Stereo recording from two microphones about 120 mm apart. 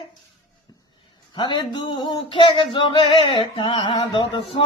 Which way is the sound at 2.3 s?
45° left (ahead or behind).